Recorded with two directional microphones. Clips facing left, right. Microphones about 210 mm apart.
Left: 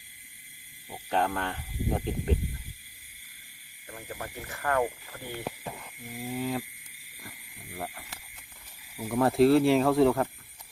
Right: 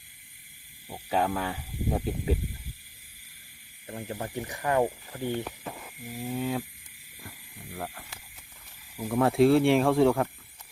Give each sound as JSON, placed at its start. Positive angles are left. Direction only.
{"t": 0.9, "sound": "speech", "side_deg": -5}
{"t": 3.8, "sound": "speech", "side_deg": -25}
{"t": 6.1, "sound": "speech", "side_deg": 0}